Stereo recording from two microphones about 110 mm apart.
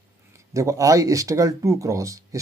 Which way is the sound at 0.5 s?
30° right (ahead or behind).